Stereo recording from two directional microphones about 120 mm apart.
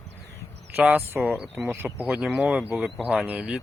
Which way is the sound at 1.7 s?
20° right (ahead or behind).